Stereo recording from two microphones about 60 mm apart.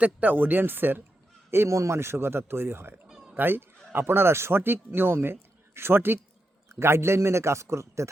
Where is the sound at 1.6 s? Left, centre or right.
Right.